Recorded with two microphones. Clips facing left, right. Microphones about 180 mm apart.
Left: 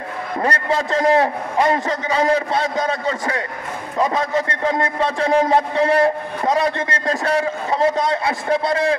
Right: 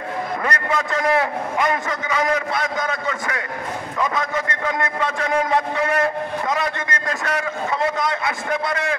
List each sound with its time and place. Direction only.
0.4 s a man's voice: 30° left (ahead or behind)